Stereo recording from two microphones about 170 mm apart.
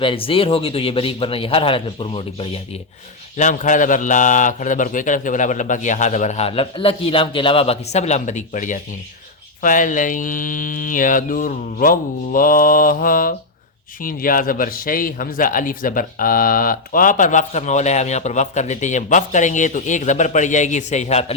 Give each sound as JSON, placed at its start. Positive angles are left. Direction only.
{"t": 0.0, "sound": "speech", "side_deg": 30}
{"t": 3.3, "sound": "a man's voice", "side_deg": 45}